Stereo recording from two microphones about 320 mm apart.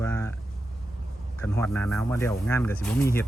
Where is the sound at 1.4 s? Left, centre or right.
Centre.